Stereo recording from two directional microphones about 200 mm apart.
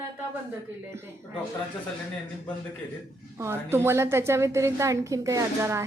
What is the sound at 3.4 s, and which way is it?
A woman's voice, 10° right (ahead or behind).